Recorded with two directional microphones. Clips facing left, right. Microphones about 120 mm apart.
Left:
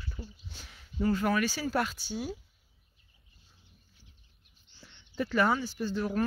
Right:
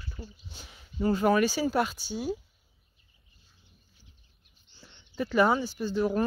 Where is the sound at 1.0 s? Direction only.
25° right (ahead or behind).